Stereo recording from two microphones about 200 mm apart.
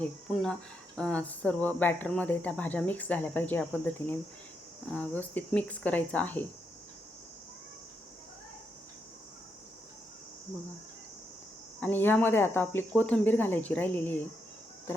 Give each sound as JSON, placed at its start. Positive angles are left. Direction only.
{"t": 0.9, "sound": "speech", "side_deg": 5}
{"t": 11.8, "sound": "speech", "side_deg": 10}